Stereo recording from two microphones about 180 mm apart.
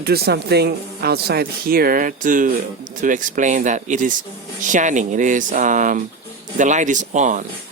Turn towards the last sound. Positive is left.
turn(degrees=-45)  # may be behind; listen again after turning